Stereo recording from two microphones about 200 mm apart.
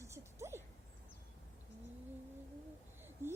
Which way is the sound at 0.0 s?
15° right (ahead or behind).